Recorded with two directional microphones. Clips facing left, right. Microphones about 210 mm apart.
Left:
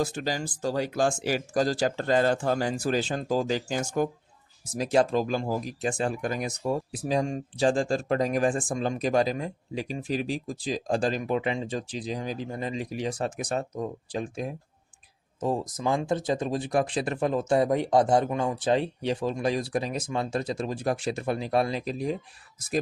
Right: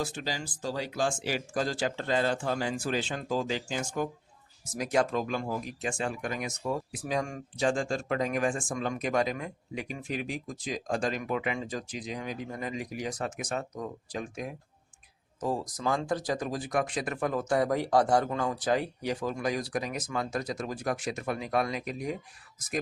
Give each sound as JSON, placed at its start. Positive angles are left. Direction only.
{"t": 0.0, "sound": "speech", "side_deg": 45}
{"t": 4.8, "sound": "speech", "side_deg": 30}